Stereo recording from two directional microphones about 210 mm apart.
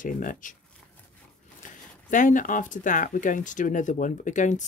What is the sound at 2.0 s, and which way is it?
Speech, 40° left (ahead or behind).